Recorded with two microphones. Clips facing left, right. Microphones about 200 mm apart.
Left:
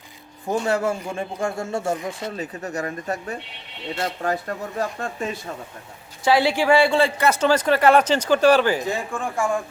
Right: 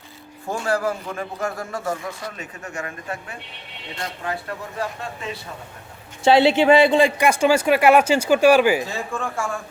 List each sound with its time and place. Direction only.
0.4 s a man's voice: 20° left (ahead or behind); by 5.4 s 45° left (ahead or behind)
6.2 s a man's voice: 25° right (ahead or behind)
8.9 s speech: 15° left (ahead or behind)